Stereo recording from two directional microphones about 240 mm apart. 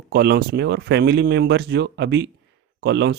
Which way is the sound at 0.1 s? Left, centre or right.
Right.